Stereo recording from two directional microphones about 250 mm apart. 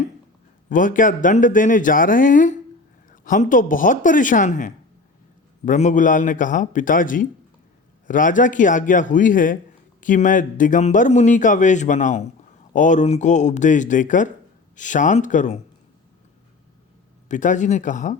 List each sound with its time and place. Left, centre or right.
0.7 s a man's voice: left
17.2 s a man's voice: left